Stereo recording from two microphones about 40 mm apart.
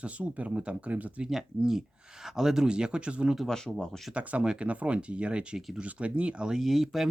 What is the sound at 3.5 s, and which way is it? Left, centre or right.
Speech, centre.